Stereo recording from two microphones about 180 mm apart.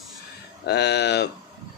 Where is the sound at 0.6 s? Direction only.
65° left (ahead or behind).